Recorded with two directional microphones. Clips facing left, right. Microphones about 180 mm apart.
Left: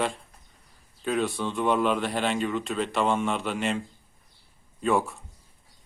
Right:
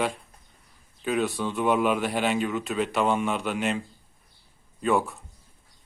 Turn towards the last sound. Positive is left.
turn(degrees=0)  # may be behind; listen again after turning